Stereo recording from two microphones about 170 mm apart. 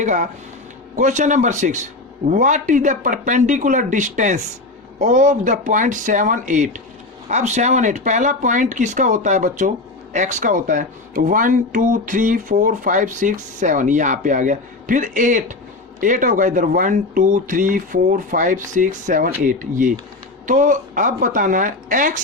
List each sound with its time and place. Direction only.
0.0 s speech: 45° right (ahead or behind)